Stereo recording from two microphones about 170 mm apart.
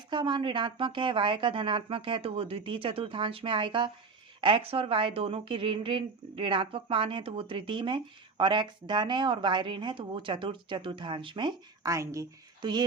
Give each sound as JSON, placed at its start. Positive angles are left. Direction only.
{"t": 0.1, "sound": "a woman's voice", "side_deg": -30}